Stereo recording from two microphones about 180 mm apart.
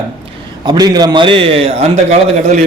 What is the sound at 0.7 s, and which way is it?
A man's voice, 20° right (ahead or behind).